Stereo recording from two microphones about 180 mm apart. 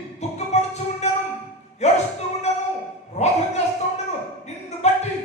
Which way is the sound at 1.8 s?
40° left (ahead or behind).